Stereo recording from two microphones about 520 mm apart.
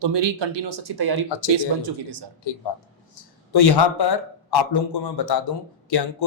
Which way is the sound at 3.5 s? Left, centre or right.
Left.